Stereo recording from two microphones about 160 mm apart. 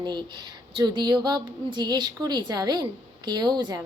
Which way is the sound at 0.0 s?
25° right (ahead or behind).